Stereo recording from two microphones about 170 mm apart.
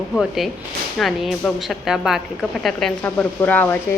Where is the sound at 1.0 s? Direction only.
Centre (ahead or behind).